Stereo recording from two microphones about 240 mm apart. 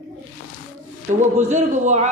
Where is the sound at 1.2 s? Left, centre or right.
Right.